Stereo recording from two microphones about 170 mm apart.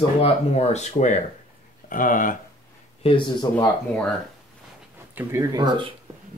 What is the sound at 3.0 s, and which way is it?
Speech, 30° left (ahead or behind).